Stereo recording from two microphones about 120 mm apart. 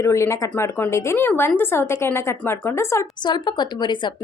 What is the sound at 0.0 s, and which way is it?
Speech, 25° left (ahead or behind).